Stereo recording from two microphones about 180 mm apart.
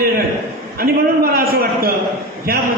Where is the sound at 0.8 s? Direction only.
55° right (ahead or behind).